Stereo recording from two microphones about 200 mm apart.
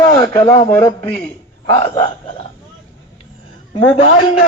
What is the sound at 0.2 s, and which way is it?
A man's voice, 10° left (ahead or behind).